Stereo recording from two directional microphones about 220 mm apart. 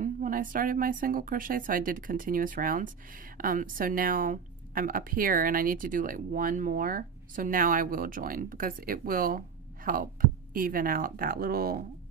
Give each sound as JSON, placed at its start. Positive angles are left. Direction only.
{"t": 0.0, "sound": "a woman's voice", "side_deg": -40}